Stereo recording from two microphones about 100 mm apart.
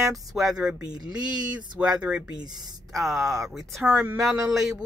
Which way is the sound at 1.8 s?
10° right (ahead or behind).